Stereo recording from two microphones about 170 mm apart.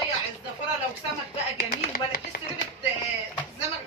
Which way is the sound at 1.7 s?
55° left (ahead or behind).